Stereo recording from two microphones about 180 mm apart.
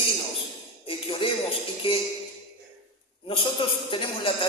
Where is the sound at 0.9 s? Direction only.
30° left (ahead or behind).